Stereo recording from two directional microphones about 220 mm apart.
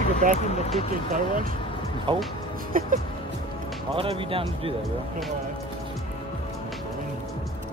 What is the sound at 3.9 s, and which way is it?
Speech, 25° right (ahead or behind).